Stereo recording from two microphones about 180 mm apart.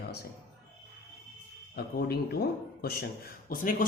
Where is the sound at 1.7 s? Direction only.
60° left (ahead or behind).